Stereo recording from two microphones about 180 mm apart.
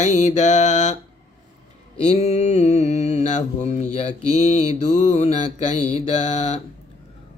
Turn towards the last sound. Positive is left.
turn(degrees=40)  # may be behind; listen again after turning